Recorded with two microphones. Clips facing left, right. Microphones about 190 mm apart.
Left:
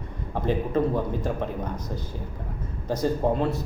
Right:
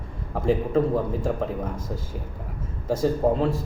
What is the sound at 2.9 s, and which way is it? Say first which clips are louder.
Speech: right 2 dB; 5° right (ahead or behind).